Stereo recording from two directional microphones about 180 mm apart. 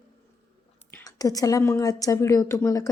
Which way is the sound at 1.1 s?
20° left (ahead or behind).